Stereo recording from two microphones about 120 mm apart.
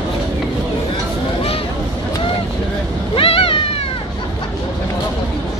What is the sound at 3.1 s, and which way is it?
Cat, 50° left (ahead or behind).